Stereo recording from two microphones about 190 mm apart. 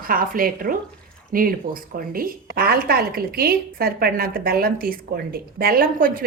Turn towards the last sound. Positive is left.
turn(degrees=-45)  # may be behind; listen again after turning